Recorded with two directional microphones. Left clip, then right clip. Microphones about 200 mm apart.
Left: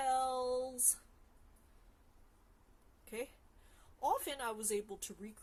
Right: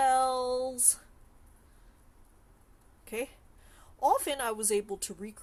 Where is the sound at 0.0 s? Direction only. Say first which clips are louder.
Right 9 dB; 25° right (ahead or behind).